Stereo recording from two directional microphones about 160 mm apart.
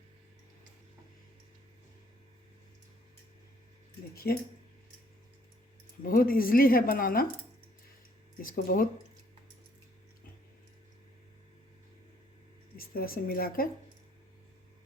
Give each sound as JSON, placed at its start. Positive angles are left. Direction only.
{"t": 4.1, "sound": "speech", "side_deg": 70}
{"t": 6.0, "sound": "speech", "side_deg": 65}
{"t": 8.4, "sound": "speech", "side_deg": 60}
{"t": 12.7, "sound": "a woman's voice", "side_deg": 65}